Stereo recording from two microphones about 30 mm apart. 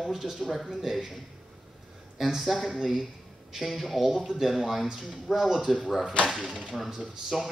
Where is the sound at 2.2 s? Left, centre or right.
Centre.